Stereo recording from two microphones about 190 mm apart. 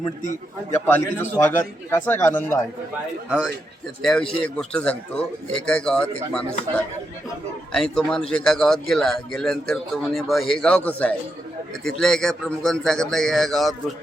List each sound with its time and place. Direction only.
0.9 s a man's voice: 10° left (ahead or behind)
4.0 s a man's voice: 5° left (ahead or behind)